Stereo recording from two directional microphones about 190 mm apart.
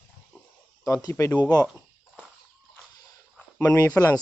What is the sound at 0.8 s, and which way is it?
Speech, 20° left (ahead or behind).